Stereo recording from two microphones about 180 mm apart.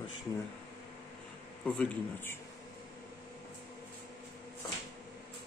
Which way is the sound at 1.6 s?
5° left (ahead or behind).